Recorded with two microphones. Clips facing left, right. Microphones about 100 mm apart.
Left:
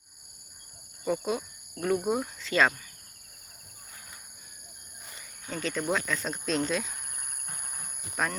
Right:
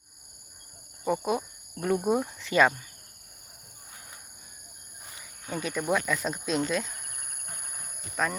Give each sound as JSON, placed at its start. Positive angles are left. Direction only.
{"t": 1.0, "sound": "speech", "side_deg": -15}
{"t": 5.5, "sound": "speech", "side_deg": -10}
{"t": 8.2, "sound": "speech", "side_deg": 5}